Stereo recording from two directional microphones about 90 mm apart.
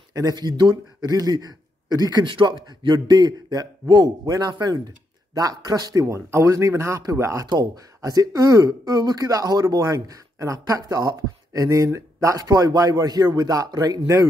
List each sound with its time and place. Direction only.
0.1 s a man's voice: 45° right (ahead or behind)
7.4 s speech: 45° right (ahead or behind)